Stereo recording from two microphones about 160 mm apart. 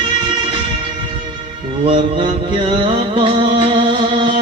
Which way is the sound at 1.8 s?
35° right (ahead or behind).